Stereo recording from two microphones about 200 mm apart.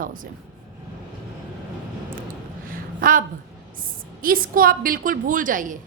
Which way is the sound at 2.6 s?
45° right (ahead or behind).